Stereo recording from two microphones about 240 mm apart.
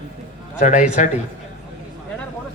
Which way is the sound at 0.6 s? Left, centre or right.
Left.